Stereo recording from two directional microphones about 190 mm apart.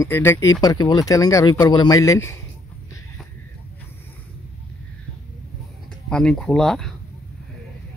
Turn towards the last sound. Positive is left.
turn(degrees=0)  # may be behind; listen again after turning